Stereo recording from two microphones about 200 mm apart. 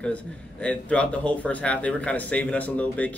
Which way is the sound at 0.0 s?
5° left (ahead or behind).